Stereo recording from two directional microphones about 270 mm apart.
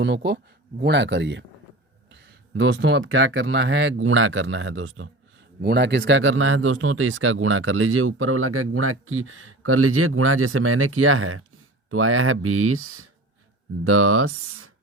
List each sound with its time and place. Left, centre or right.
0.0 s a man's voice: right